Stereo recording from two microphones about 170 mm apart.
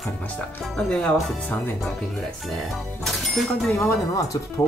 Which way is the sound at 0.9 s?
5° left (ahead or behind).